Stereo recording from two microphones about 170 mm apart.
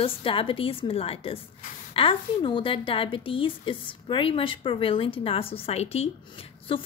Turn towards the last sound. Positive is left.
turn(degrees=30)  # may be behind; listen again after turning